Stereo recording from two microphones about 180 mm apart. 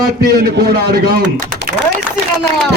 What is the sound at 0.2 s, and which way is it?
Speech, 60° right (ahead or behind).